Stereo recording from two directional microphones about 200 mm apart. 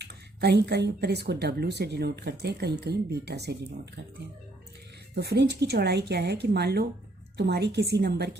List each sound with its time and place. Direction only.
0.0 s speech: 55° right (ahead or behind)
5.1 s speech: 55° right (ahead or behind)